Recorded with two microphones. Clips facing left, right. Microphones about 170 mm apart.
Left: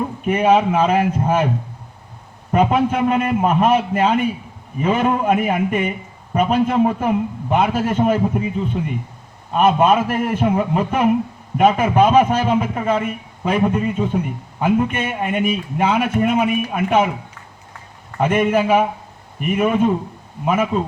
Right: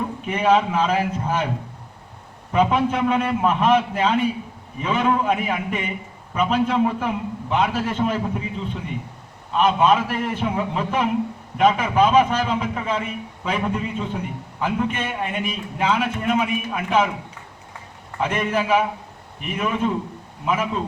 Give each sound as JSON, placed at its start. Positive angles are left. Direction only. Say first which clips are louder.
{"t": 0.3, "sound": "a man's voice", "louder": "left 4 dB", "side_deg": 50}
{"t": 2.5, "sound": "a man's voice", "louder": "left 3 dB", "side_deg": 50}
{"t": 9.5, "sound": "a man's voice", "louder": "left 3 dB", "side_deg": 50}
{"t": 18.2, "sound": "a man's voice", "louder": "left 6 dB", "side_deg": 55}